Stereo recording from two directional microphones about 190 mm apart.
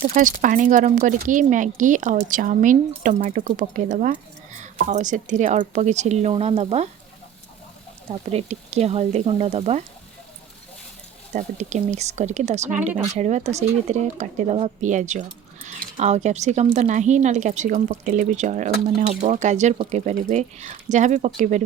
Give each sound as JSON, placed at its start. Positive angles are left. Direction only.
{"t": 0.1, "sound": "speech", "side_deg": -45}
{"t": 8.3, "sound": "speech", "side_deg": -35}
{"t": 11.3, "sound": "speech", "side_deg": -40}